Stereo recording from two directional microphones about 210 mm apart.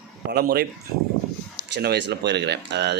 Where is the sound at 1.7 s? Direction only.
50° right (ahead or behind).